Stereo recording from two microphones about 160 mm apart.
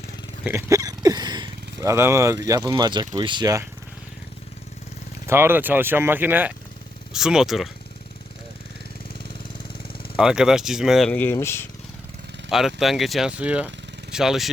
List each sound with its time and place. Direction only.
0.4 s speech: 15° right (ahead or behind)
5.2 s speech: 15° right (ahead or behind)
10.2 s speech: 5° right (ahead or behind); by 11.6 s 15° left (ahead or behind)
12.5 s speech: centre (ahead or behind)